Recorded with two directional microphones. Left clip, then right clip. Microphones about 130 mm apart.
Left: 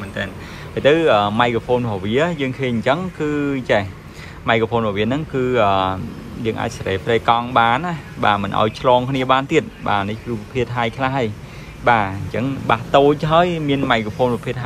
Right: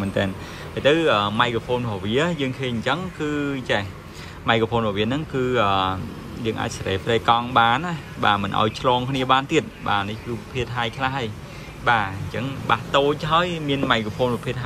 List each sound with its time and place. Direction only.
0.7 s a man's voice: 20° right (ahead or behind)